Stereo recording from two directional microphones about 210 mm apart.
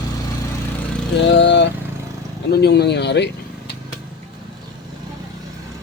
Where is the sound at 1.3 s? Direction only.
55° left (ahead or behind).